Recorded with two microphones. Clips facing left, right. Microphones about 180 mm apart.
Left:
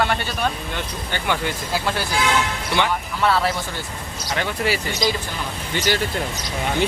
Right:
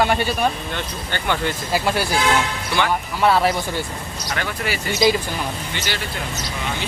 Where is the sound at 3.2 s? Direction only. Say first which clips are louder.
Right 3 dB; 15° right (ahead or behind).